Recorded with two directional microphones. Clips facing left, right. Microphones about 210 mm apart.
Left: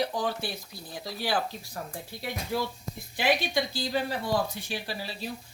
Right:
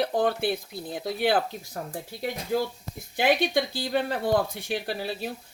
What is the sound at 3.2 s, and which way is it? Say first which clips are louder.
Speech: right 4 dB; 55° right (ahead or behind).